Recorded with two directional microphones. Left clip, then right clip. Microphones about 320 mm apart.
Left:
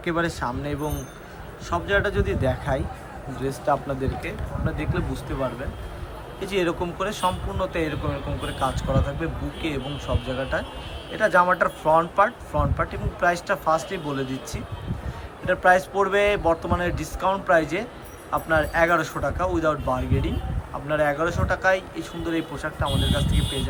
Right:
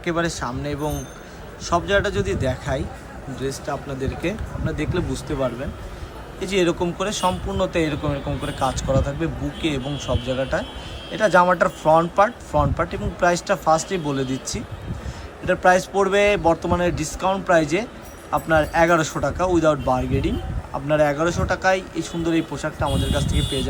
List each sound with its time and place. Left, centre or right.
0.0 s speech: centre